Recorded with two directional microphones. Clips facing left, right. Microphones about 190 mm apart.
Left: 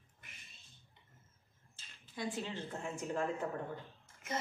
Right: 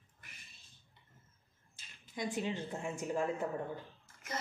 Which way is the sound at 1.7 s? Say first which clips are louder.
Right 2 dB; 15° right (ahead or behind).